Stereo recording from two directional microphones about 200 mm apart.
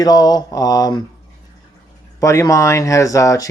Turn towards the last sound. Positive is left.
turn(degrees=15)  # may be behind; listen again after turning